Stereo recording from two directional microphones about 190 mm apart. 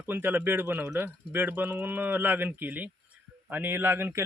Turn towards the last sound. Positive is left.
turn(degrees=-10)  # may be behind; listen again after turning